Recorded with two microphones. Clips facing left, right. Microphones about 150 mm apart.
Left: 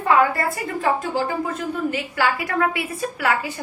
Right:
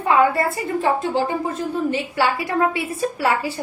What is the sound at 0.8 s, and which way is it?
A woman's voice, 25° right (ahead or behind).